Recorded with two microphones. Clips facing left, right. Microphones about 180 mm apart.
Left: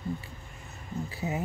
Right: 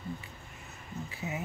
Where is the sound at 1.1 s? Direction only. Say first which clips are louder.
Left 5 dB; 35° left (ahead or behind).